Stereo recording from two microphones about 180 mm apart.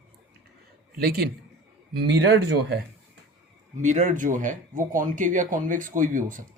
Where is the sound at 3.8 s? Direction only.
40° right (ahead or behind).